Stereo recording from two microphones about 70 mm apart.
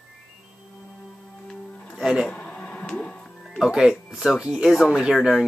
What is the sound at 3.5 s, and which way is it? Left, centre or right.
Speech, centre.